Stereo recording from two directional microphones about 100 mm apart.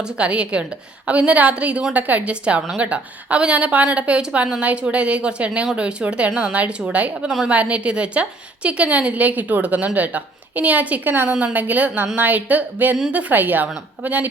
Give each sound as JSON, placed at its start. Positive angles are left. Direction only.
{"t": 0.2, "sound": "a woman's voice", "side_deg": -10}